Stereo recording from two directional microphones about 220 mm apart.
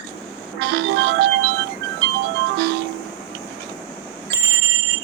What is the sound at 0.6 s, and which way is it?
Music, 50° right (ahead or behind).